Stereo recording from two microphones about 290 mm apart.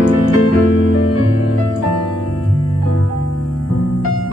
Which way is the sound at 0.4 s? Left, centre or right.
Left.